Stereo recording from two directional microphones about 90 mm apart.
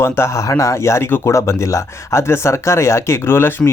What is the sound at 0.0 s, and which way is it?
Speech, 30° left (ahead or behind).